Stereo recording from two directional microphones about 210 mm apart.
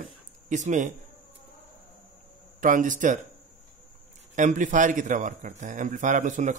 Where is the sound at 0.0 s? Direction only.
35° right (ahead or behind).